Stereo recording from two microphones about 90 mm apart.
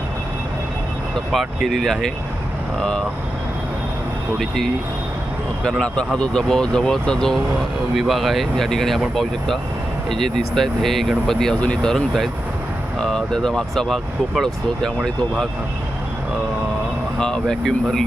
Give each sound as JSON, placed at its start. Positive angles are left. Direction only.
{"t": 1.3, "sound": "speech", "side_deg": 0}
{"t": 4.4, "sound": "speech", "side_deg": 5}
{"t": 17.2, "sound": "speech", "side_deg": 10}